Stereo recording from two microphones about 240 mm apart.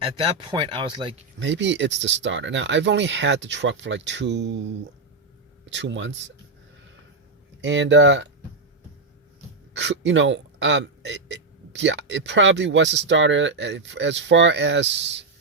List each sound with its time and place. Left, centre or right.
0.0 s speech: right
1.4 s a man's voice: right
5.7 s a man's voice: right
7.6 s a man's voice: right
9.7 s a man's voice: right